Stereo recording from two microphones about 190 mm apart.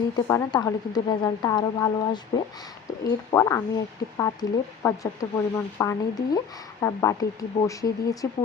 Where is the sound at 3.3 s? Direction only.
15° left (ahead or behind).